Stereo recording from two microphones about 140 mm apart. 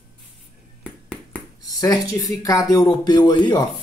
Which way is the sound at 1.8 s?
25° left (ahead or behind).